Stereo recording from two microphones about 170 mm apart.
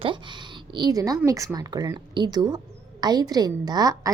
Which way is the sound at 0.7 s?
25° right (ahead or behind).